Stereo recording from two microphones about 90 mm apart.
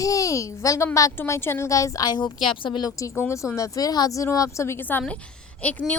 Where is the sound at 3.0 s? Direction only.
30° left (ahead or behind).